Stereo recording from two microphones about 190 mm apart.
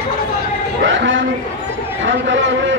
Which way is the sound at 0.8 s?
75° right (ahead or behind).